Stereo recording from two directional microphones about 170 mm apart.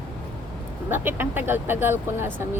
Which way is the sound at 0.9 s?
15° right (ahead or behind).